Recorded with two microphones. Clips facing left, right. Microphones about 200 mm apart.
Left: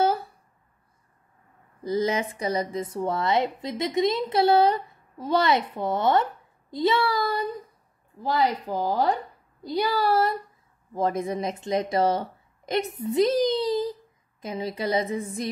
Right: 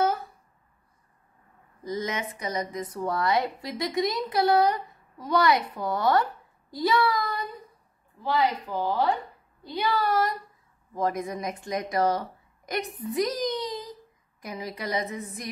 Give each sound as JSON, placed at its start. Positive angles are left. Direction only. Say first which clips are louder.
{"t": 1.9, "sound": "a woman's voice", "louder": "left 6 dB", "side_deg": 30}